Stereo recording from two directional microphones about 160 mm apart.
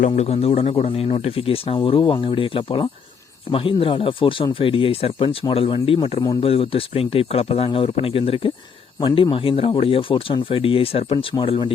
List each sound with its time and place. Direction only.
0.1 s speech: 40° left (ahead or behind)